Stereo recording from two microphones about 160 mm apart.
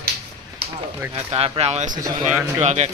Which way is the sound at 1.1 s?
40° right (ahead or behind).